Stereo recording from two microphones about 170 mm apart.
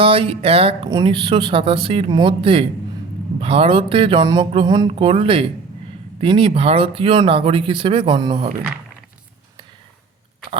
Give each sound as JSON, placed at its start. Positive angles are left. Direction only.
{"t": 0.0, "sound": "speech", "side_deg": -30}